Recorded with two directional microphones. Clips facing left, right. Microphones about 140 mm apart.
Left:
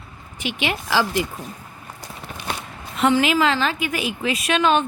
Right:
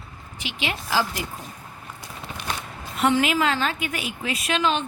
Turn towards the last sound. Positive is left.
turn(degrees=60)  # may be behind; listen again after turning